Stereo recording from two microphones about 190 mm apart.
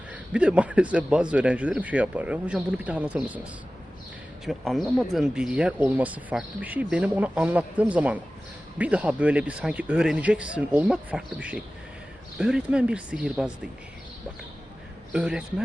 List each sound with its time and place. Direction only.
0.1 s speech: 5° right (ahead or behind)
4.4 s speech: centre (ahead or behind)
15.1 s speech: 5° right (ahead or behind)